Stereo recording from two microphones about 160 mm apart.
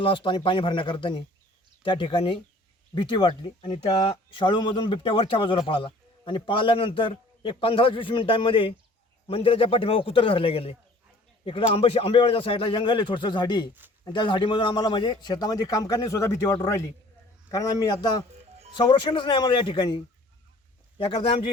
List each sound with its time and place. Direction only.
0.0 s a man's voice: 30° left (ahead or behind)
21.0 s speech: 30° left (ahead or behind)